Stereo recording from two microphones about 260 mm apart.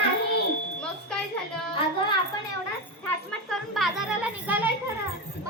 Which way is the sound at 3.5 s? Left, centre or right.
Centre.